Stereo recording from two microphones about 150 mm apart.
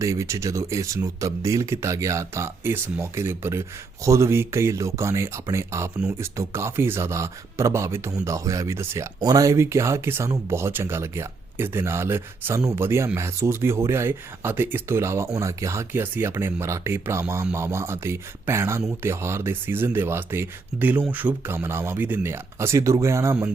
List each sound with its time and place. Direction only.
0.0 s speech: 20° right (ahead or behind)